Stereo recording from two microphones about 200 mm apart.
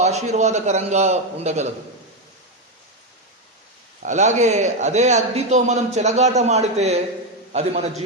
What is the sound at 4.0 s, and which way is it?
A man's voice, 35° right (ahead or behind).